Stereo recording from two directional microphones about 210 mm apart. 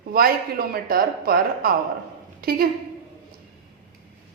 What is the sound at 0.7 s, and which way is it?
A woman's voice, 45° right (ahead or behind).